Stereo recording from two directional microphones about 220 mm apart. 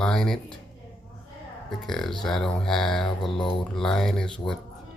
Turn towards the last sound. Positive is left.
turn(degrees=5)  # may be behind; listen again after turning